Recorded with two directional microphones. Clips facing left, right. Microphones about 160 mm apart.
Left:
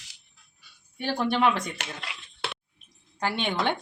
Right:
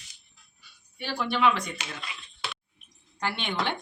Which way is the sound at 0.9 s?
50° left (ahead or behind).